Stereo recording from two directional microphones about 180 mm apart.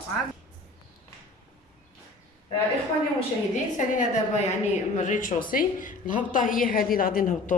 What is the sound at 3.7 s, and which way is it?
A woman's voice, 45° left (ahead or behind).